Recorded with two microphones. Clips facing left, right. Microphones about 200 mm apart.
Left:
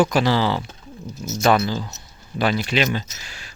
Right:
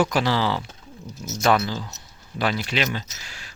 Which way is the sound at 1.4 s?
10° left (ahead or behind).